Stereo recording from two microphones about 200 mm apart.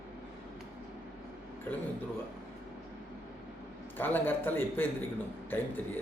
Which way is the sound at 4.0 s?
10° left (ahead or behind).